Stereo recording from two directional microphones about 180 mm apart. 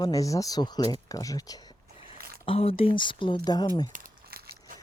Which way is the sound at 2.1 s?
55° right (ahead or behind).